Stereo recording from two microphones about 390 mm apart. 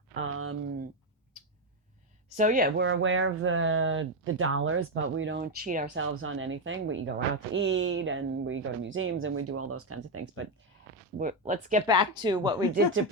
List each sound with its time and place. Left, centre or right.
0.1 s a sound: right
2.3 s speech: centre; by 10.4 s right
11.2 s speech: centre